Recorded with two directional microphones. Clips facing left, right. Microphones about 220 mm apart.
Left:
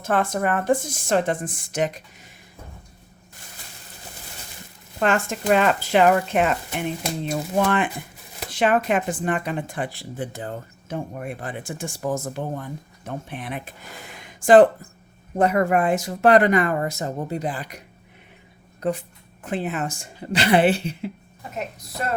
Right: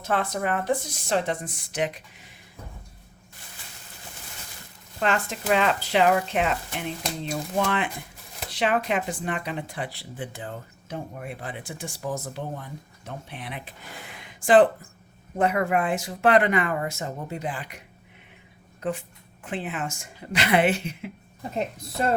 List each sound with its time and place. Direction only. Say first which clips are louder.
0.0 s speech: left 4 dB; 50° left (ahead or behind)
4.9 s a woman's voice: left 4 dB; 50° left (ahead or behind)
21.5 s speech: right 2 dB; 30° right (ahead or behind)